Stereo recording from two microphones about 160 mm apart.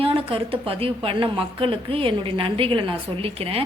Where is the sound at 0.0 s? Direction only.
35° right (ahead or behind).